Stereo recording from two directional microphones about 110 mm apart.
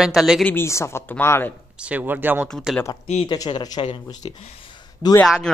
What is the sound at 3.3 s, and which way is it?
Speech, 40° left (ahead or behind).